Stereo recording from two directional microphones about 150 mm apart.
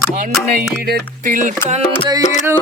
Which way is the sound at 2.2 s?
55° left (ahead or behind).